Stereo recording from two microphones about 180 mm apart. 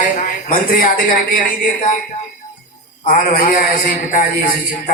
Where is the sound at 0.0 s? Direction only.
45° left (ahead or behind).